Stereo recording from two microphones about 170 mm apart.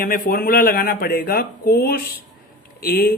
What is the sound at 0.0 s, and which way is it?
Speech, 55° left (ahead or behind).